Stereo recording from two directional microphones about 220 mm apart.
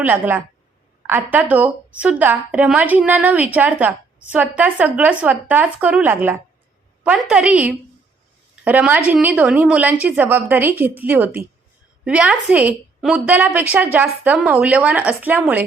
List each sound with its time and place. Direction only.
0.0 s a woman's voice: 10° right (ahead or behind)